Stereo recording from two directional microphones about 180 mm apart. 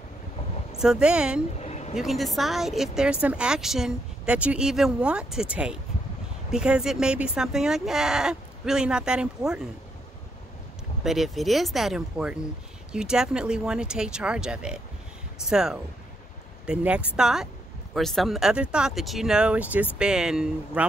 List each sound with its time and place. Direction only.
0.7 s a woman's voice: 5° right (ahead or behind)
1.6 s vehicle: 40° left (ahead or behind)
2.0 s a woman's voice: centre (ahead or behind)
11.1 s a woman's voice: centre (ahead or behind)